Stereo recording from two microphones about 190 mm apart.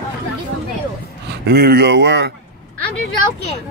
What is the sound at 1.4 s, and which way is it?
Speech, 55° right (ahead or behind).